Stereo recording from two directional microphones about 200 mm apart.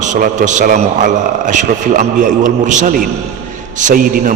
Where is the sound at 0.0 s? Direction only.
40° right (ahead or behind).